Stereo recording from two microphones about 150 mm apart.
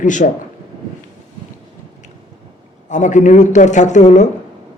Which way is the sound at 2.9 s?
55° left (ahead or behind).